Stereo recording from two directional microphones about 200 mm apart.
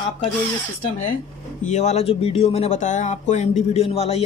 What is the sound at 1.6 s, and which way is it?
Speech, 35° left (ahead or behind).